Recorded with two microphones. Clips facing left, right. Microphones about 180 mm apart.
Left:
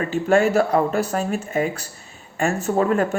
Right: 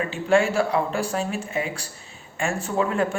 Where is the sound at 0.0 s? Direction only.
45° left (ahead or behind).